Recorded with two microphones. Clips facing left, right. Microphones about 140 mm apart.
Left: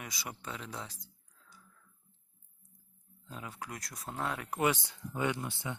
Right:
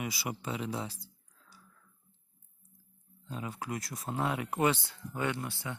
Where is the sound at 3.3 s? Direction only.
5° right (ahead or behind).